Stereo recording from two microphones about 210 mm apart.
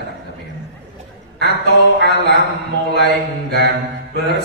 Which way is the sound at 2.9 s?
55° right (ahead or behind).